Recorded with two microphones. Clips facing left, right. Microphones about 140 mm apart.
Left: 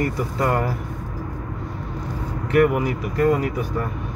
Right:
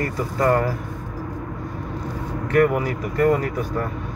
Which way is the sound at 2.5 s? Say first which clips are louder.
Left 1 dB; 15° left (ahead or behind).